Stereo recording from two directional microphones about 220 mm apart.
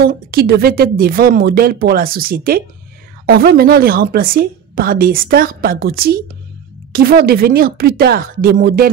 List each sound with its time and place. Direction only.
0.0 s a woman's voice: 45° right (ahead or behind)